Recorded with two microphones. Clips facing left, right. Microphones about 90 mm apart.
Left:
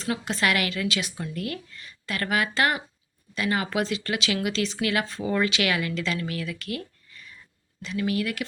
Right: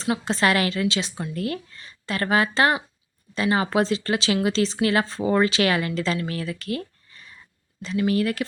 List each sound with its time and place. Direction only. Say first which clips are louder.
0.0 s speech: right 4 dB; 30° right (ahead or behind)